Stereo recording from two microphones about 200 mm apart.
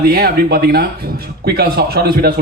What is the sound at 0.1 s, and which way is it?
A man's voice, 50° right (ahead or behind).